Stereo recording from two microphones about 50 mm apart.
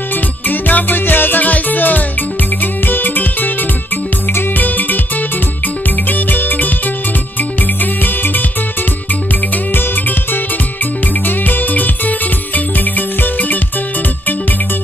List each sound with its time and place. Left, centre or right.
0.1 s music: left
9.8 s music: left